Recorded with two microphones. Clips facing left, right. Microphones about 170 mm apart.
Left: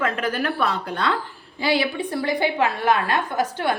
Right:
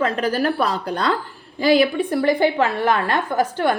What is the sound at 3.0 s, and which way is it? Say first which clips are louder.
Speech: right 3 dB; 50° right (ahead or behind).